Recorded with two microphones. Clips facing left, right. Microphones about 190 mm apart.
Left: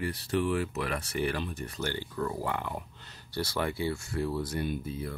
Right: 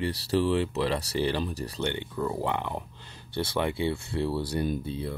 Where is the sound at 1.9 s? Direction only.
20° right (ahead or behind).